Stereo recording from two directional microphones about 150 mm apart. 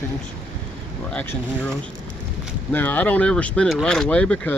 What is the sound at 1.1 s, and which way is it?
Speech, 10° left (ahead or behind).